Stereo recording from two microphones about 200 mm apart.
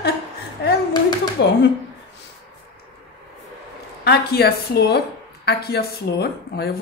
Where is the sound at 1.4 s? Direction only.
60° left (ahead or behind).